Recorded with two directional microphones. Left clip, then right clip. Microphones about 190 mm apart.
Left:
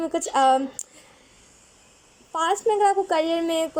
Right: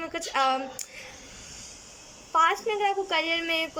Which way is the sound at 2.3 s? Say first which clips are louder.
Left 1 dB; 25° left (ahead or behind).